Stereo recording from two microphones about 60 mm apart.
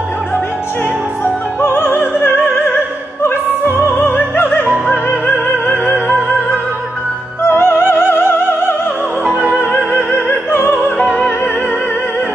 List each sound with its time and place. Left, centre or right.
1.2 s music: left
3.3 s opera: left
7.4 s opera: left
9.2 s opera: right
9.5 s opera: left
10.7 s opera: centre